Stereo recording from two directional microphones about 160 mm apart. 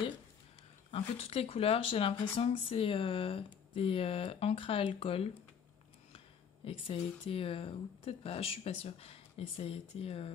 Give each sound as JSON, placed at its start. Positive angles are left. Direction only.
{"t": 0.9, "sound": "speech", "side_deg": 40}